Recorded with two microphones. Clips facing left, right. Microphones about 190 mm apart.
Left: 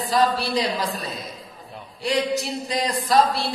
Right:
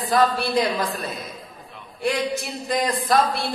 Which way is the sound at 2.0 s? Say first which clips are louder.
Left 1 dB; 55° right (ahead or behind).